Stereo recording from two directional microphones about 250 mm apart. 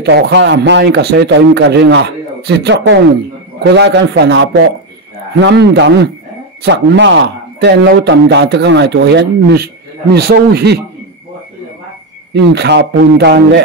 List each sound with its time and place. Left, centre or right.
0.0 s speech: right
12.4 s speech: right